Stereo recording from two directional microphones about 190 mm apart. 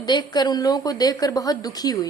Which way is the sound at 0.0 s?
20° left (ahead or behind).